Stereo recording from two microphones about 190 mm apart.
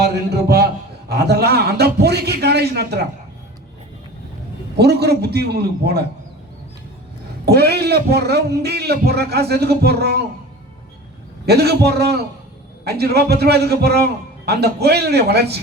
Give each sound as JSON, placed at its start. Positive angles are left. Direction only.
{"t": 0.5, "sound": "a man's voice", "side_deg": -60}
{"t": 4.8, "sound": "speech", "side_deg": -55}
{"t": 7.4, "sound": "speech", "side_deg": -60}
{"t": 11.4, "sound": "speech", "side_deg": -60}